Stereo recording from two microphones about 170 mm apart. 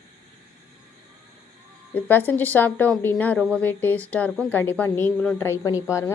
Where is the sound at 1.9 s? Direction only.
10° left (ahead or behind).